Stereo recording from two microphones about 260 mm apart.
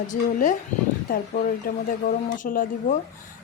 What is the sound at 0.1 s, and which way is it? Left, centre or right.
Speech, left.